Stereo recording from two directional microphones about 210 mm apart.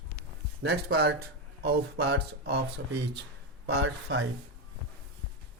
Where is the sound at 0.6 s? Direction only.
50° right (ahead or behind).